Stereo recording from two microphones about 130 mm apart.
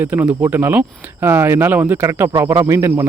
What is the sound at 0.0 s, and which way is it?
Speech, 15° right (ahead or behind).